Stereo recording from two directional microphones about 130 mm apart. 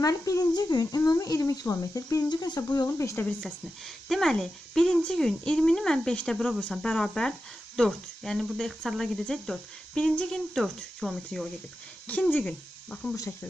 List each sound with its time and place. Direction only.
0.0 s speech: 25° left (ahead or behind)
4.1 s speech: 5° left (ahead or behind)
12.1 s speech: 15° left (ahead or behind)